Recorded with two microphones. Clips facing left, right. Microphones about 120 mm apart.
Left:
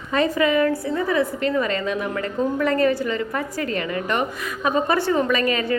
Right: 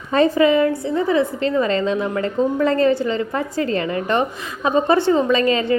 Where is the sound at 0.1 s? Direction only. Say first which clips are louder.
Right 5 dB; 30° right (ahead or behind).